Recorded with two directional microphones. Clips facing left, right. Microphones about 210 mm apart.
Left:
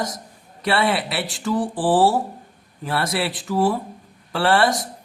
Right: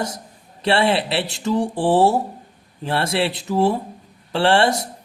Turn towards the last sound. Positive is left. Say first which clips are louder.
# right 2 dB
turn(degrees=-25)  # may be behind; listen again after turning